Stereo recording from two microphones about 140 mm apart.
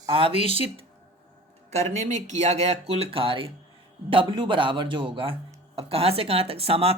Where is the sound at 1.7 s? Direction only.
55° right (ahead or behind).